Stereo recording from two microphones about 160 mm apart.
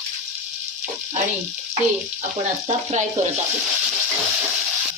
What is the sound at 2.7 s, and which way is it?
Speech, 45° right (ahead or behind).